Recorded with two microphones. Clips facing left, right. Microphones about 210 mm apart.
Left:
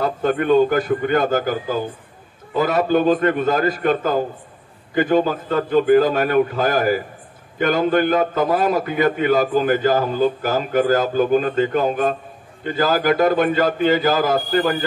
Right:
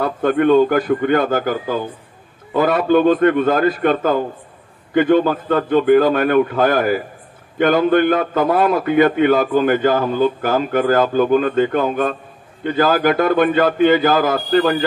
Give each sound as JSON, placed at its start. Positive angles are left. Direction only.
{"t": 0.0, "sound": "a man's voice", "side_deg": -50}